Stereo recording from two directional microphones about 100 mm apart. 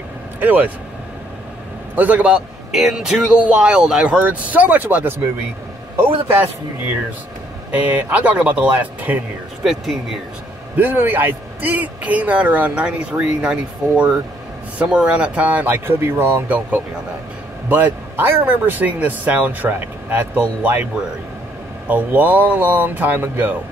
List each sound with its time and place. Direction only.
0.4 s speech: 15° right (ahead or behind)
2.0 s a man's voice: 15° right (ahead or behind)
7.7 s a man's voice: 15° right (ahead or behind)
10.8 s a man's voice: 20° right (ahead or behind)
17.6 s a man's voice: 20° right (ahead or behind)